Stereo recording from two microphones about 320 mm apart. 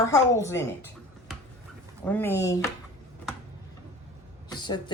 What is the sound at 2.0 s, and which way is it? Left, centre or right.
Speech, centre.